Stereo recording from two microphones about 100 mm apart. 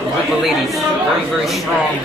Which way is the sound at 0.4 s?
Centre (ahead or behind).